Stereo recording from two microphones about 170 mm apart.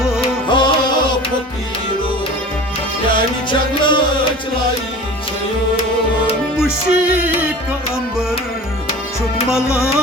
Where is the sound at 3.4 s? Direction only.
30° left (ahead or behind).